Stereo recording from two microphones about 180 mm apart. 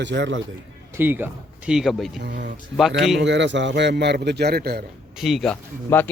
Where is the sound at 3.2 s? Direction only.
80° right; by 4.8 s 60° right (ahead or behind).